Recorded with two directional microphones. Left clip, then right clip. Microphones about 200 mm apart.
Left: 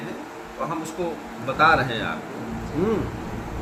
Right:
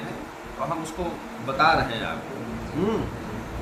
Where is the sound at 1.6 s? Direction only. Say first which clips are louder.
Left 2 dB; 15° right (ahead or behind).